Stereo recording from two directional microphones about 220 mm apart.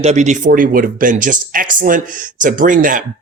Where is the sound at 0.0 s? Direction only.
30° right (ahead or behind).